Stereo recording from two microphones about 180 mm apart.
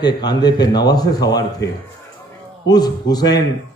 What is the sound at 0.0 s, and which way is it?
A man's voice, 20° left (ahead or behind).